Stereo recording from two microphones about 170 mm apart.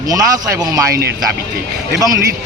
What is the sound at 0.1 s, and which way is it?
Speech, 20° right (ahead or behind).